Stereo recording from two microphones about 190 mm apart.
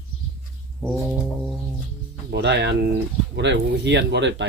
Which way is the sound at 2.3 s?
65° right (ahead or behind).